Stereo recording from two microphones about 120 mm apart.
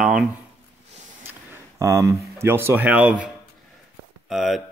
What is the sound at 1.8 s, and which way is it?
Speech, 25° right (ahead or behind).